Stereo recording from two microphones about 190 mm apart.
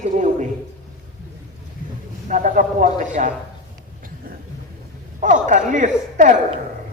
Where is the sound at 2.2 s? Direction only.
40° right (ahead or behind).